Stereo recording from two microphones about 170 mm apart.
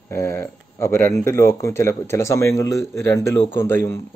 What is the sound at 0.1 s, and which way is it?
Speech, 15° left (ahead or behind).